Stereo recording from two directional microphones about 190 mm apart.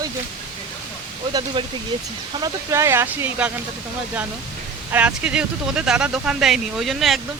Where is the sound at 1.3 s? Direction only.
25° right (ahead or behind).